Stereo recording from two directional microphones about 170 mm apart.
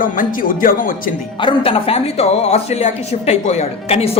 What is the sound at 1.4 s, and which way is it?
A woman's voice, 30° left (ahead or behind).